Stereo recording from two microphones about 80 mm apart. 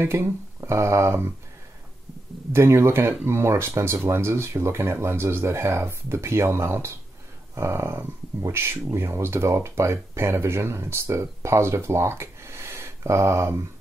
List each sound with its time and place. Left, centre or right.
0.0 s speech: right
2.5 s speech: right